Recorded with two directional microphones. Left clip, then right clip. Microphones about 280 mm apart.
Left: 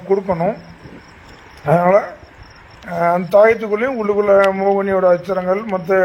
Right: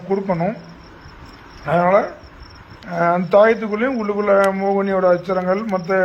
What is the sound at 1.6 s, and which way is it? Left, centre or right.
A man's voice, left.